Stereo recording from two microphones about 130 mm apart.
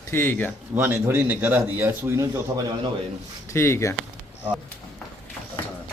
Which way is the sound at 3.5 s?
20° left (ahead or behind).